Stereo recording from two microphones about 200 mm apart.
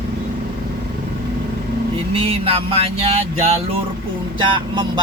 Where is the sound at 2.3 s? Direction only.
30° right (ahead or behind).